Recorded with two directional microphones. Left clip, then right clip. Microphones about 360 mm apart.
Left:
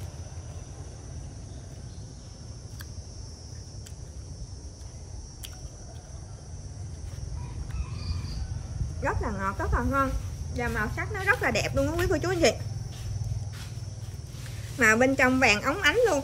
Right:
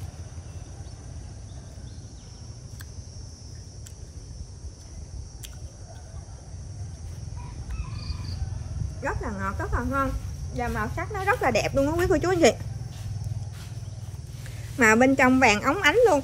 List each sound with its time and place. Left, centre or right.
9.0 s speech: centre
14.8 s a woman's voice: centre